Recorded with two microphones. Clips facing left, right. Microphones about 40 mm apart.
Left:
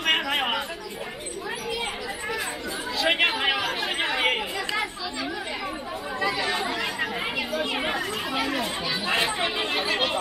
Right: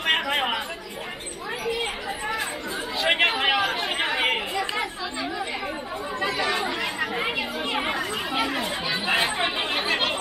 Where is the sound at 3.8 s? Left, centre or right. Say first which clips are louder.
Right 1 dB; centre.